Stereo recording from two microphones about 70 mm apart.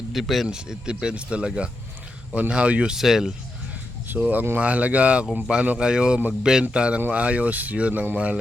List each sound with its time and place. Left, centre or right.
0.1 s speech: centre
0.4 s speech: centre
4.1 s speech: right
5.2 s speech: centre